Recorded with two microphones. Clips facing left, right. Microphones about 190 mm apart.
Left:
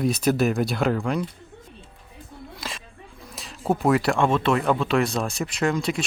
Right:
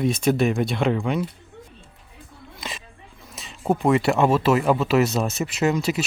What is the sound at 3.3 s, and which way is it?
Speech, centre (ahead or behind).